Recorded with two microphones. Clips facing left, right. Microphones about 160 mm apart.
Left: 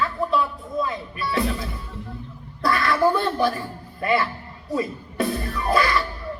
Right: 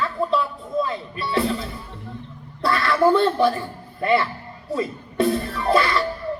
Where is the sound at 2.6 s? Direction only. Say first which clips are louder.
Right 2 dB; 25° right (ahead or behind).